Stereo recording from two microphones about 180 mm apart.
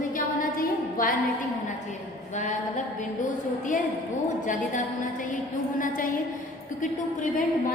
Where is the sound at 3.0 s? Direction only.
45° left (ahead or behind).